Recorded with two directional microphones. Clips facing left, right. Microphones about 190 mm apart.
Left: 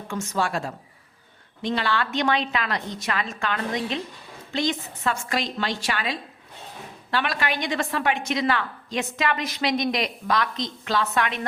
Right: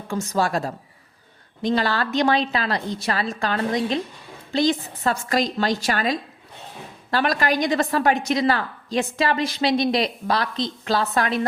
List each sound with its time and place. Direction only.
0.1 s a woman's voice: 35° right (ahead or behind)